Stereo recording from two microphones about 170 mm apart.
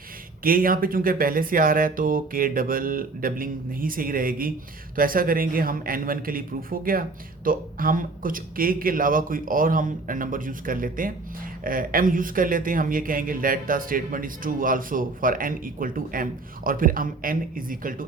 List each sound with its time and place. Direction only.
0.4 s speech: 55° right (ahead or behind)